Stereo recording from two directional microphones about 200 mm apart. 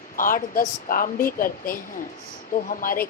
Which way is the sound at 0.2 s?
45° left (ahead or behind).